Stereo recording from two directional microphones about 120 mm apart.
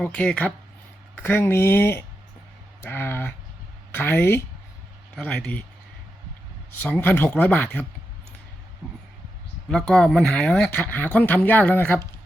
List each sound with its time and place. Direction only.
0.0 s speech: 10° left (ahead or behind)
6.8 s speech: 10° left (ahead or behind)
9.6 s speech: 5° left (ahead or behind)